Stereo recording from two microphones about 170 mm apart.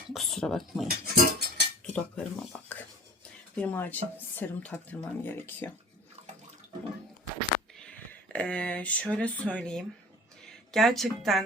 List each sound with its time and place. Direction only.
0.1 s speech: centre (ahead or behind)
0.9 s a sound: 65° right (ahead or behind)
1.8 s speech: 5° left (ahead or behind)
8.3 s speech: 5° left (ahead or behind)